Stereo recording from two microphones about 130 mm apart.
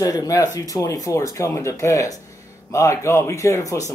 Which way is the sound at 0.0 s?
25° left (ahead or behind).